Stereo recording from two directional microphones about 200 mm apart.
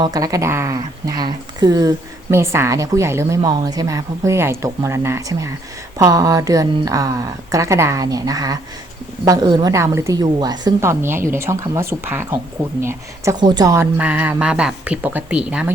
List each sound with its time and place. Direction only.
0.0 s a woman's voice: 15° right (ahead or behind)
14.0 s a woman's voice: 5° right (ahead or behind)